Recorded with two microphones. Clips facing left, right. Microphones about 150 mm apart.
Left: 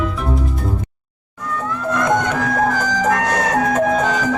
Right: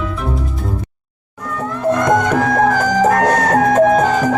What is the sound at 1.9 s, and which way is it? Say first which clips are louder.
Music: right 4 dB; 40° right (ahead or behind).